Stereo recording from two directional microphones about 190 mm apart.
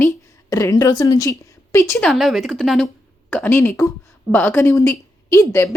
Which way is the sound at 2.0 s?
Centre (ahead or behind).